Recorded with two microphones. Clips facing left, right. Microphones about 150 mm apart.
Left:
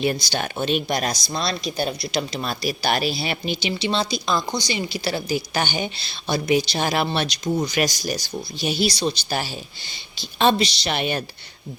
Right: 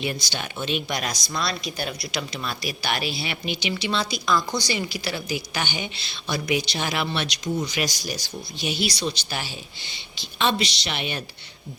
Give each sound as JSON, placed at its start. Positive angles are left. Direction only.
{"t": 0.0, "sound": "speech", "side_deg": 40}